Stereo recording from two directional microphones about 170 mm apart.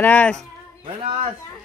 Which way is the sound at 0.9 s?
35° right (ahead or behind).